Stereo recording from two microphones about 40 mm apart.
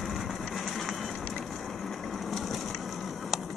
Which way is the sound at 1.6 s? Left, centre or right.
Centre.